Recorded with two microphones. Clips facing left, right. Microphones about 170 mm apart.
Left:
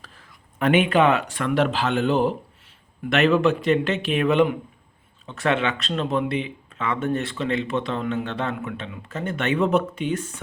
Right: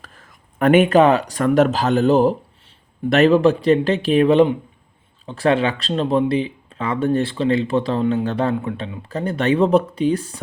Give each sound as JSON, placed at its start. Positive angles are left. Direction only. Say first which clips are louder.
{"t": 0.0, "sound": "speech", "louder": "right 3 dB", "side_deg": -50}